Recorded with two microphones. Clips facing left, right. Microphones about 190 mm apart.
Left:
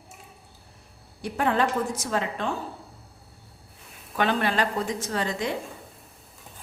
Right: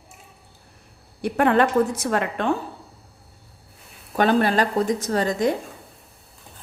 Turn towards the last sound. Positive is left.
turn(degrees=-40)  # may be behind; listen again after turning